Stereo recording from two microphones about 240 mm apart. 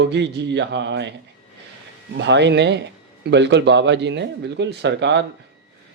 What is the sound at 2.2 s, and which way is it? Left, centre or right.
A man's voice, right.